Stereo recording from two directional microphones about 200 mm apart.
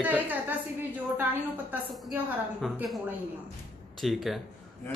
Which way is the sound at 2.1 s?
5° right (ahead or behind).